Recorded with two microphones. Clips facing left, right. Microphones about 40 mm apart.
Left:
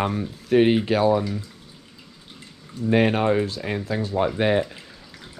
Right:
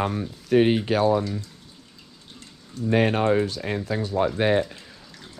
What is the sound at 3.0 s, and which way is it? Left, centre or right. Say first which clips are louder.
Speech: even; left.